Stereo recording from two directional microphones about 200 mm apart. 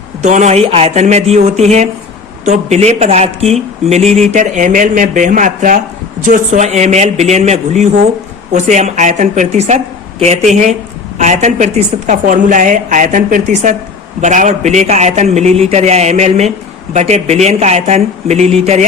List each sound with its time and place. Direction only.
0.2 s speech: 35° right (ahead or behind)